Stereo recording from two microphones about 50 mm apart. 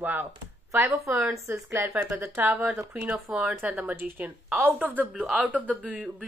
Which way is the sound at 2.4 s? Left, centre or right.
Right.